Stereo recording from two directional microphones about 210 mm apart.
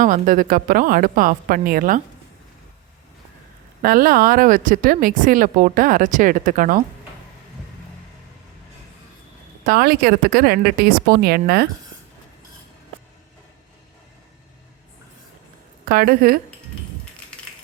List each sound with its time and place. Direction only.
0.0 s speech: 40° right (ahead or behind)
3.8 s speech: 45° right (ahead or behind)
9.6 s speech: 45° right (ahead or behind)
15.9 s speech: 45° right (ahead or behind)